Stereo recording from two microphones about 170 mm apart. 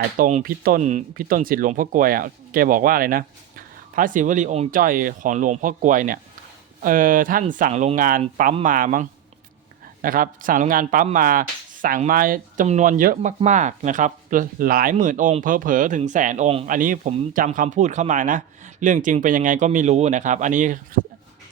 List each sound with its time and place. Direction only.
0.2 s speech: 50° right (ahead or behind)
4.7 s speech: 55° right (ahead or behind)
16.6 s speech: 50° right (ahead or behind)